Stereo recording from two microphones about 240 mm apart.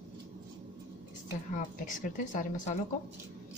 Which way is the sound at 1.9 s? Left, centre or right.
Left.